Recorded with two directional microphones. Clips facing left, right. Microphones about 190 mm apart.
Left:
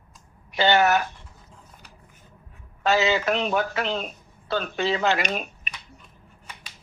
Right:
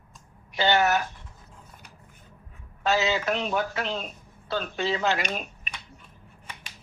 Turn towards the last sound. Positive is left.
turn(degrees=75)  # may be behind; listen again after turning